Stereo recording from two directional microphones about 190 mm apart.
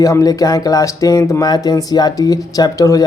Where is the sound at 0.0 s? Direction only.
20° left (ahead or behind).